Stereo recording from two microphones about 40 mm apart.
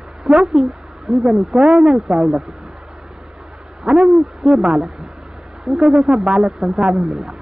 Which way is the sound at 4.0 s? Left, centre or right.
Centre.